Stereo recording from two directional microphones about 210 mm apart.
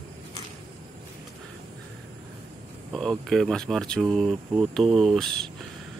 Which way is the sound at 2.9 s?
Centre (ahead or behind).